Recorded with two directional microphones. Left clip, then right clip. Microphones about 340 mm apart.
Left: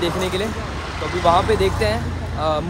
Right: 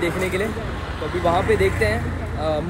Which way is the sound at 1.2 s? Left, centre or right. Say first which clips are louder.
Left 3 dB; centre.